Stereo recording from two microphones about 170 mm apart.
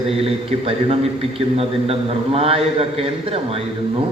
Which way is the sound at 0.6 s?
35° right (ahead or behind).